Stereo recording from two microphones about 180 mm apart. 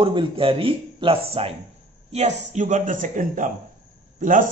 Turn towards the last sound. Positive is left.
turn(degrees=-50)  # may be behind; listen again after turning